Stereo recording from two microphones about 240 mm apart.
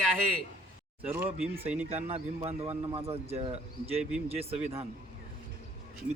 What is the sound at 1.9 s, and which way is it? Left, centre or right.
Speech, right.